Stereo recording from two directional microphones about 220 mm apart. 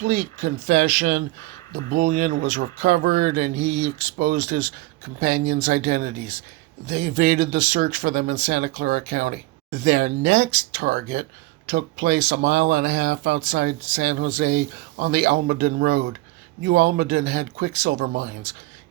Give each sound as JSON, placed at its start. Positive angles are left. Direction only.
{"t": 0.0, "sound": "speech", "side_deg": -40}